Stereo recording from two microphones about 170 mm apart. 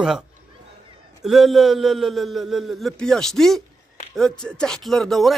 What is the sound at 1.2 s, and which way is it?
Speech, centre (ahead or behind).